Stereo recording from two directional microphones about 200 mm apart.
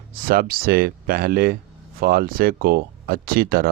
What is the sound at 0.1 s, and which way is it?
Speech, 45° right (ahead or behind).